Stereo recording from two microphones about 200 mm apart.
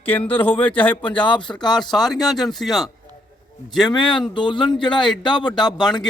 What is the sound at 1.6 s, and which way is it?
Speech, 20° left (ahead or behind).